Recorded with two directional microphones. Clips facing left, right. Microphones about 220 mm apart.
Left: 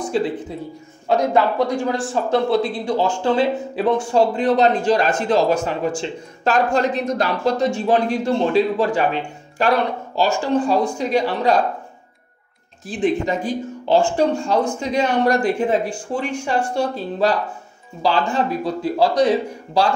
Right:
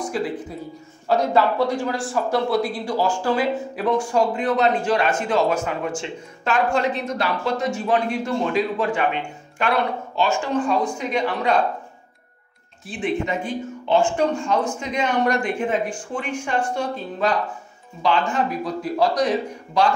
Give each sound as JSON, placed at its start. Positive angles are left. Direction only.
{"t": 0.1, "sound": "speech", "side_deg": 30}
{"t": 1.0, "sound": "speech", "side_deg": 15}
{"t": 12.8, "sound": "speech", "side_deg": 35}